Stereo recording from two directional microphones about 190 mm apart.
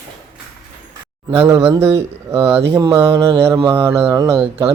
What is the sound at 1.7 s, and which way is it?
Speech, 15° right (ahead or behind).